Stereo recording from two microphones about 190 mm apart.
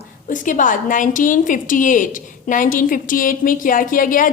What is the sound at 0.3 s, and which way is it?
A woman's voice, 45° left (ahead or behind).